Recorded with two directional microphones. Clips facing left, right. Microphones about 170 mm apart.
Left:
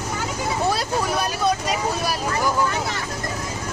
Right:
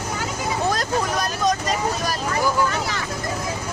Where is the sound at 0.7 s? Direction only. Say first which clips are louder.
Even; 10° left (ahead or behind).